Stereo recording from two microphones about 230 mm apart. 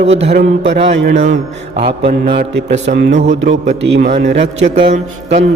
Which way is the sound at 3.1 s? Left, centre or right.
Right.